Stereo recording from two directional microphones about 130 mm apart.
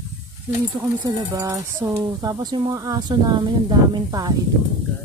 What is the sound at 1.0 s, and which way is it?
Speech, 25° right (ahead or behind).